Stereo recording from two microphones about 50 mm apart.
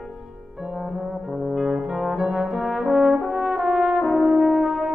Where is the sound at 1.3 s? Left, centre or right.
Centre.